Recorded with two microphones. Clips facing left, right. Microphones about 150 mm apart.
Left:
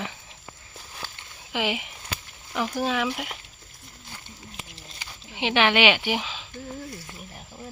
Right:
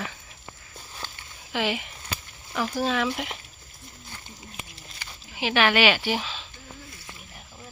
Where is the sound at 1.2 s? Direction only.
15° left (ahead or behind).